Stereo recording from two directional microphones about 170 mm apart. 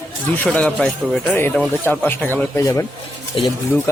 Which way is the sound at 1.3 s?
15° left (ahead or behind).